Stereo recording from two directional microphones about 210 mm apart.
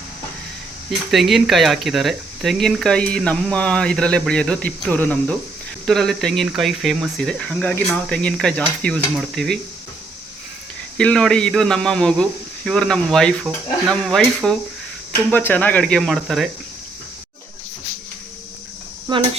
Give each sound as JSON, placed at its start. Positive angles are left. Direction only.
{"t": 0.9, "sound": "speech", "side_deg": 0}
{"t": 10.9, "sound": "speech", "side_deg": 5}
{"t": 19.1, "sound": "speech", "side_deg": -20}